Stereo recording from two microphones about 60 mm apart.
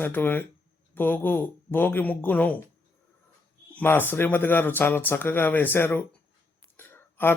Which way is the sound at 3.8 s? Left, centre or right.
Left.